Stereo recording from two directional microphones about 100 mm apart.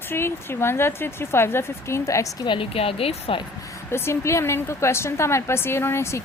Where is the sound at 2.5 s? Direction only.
70° left (ahead or behind).